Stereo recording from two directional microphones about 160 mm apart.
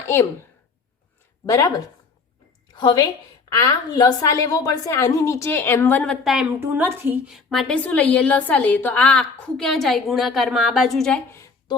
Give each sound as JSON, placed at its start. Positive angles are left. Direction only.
{"t": 0.0, "sound": "a woman's voice", "side_deg": 15}
{"t": 1.5, "sound": "speech", "side_deg": 20}
{"t": 2.7, "sound": "a woman's voice", "side_deg": 25}
{"t": 11.3, "sound": "a sound", "side_deg": 15}